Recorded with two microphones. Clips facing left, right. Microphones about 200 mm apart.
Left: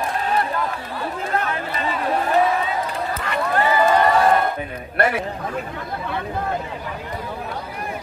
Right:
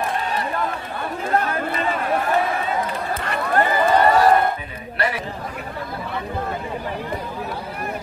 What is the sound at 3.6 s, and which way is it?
Run, 45° right (ahead or behind).